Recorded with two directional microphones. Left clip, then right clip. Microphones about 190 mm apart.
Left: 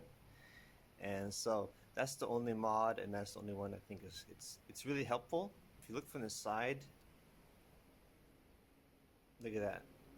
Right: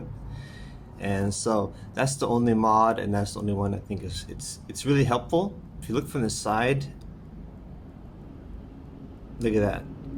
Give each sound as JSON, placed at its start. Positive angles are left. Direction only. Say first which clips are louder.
{"t": 0.9, "sound": "speech", "louder": "right 14 dB", "side_deg": 30}
{"t": 9.4, "sound": "speech", "louder": "right 17 dB", "side_deg": 25}